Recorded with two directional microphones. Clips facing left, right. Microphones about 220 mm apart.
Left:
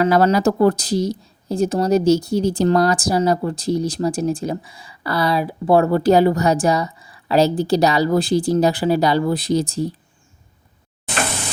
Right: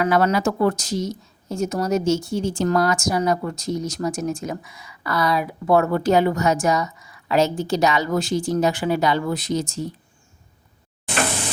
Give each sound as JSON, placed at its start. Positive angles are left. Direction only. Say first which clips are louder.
{"t": 0.0, "sound": "speech", "louder": "left 4 dB", "side_deg": 30}